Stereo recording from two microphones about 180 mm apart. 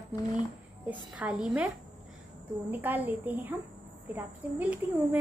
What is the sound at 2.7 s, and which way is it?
Speech, 10° right (ahead or behind).